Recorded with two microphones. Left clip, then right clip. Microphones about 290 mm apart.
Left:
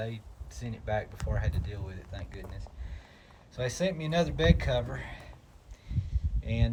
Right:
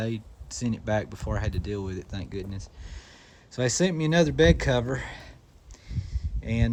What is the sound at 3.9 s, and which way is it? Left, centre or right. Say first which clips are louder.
Speech: right 4 dB; centre.